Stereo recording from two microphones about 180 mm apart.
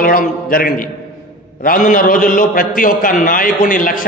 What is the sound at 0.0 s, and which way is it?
A man's voice, 50° left (ahead or behind).